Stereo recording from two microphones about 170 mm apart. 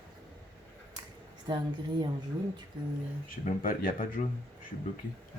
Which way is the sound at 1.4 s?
25° right (ahead or behind).